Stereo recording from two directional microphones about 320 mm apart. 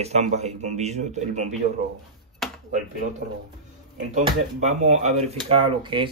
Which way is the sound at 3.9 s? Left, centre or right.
Right.